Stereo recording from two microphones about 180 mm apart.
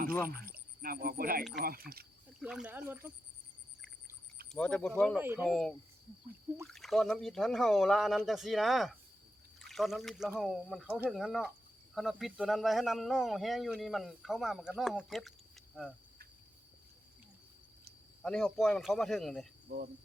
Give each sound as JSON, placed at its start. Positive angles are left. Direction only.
{"t": 0.3, "sound": "speech", "side_deg": -55}
{"t": 2.4, "sound": "speech", "side_deg": -5}
{"t": 4.5, "sound": "speech", "side_deg": 5}
{"t": 5.2, "sound": "speech", "side_deg": -10}
{"t": 5.5, "sound": "speech", "side_deg": 0}
{"t": 18.2, "sound": "speech", "side_deg": 5}
{"t": 19.7, "sound": "speech", "side_deg": -50}